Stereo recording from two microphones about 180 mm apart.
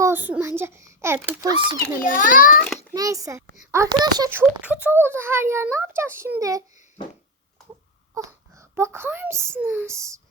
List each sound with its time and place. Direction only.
0.0 s a child's voice: 10° right (ahead or behind)
1.4 s a child's voice: 25° right (ahead or behind)
2.0 s a child's voice: 50° left (ahead or behind)
2.7 s a child's voice: 20° right (ahead or behind)
8.1 s a child's voice: 15° right (ahead or behind)